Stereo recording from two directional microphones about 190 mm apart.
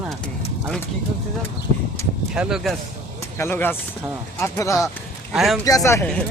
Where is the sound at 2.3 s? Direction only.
5° right (ahead or behind).